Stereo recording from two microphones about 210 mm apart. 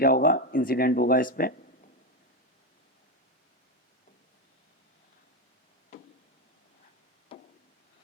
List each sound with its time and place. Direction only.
0.0 s speech: 45° left (ahead or behind)